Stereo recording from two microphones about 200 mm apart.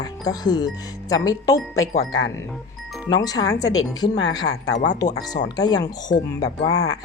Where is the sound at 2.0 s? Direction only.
70° left (ahead or behind).